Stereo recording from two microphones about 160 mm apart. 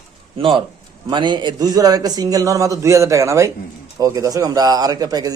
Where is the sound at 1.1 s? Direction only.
30° right (ahead or behind).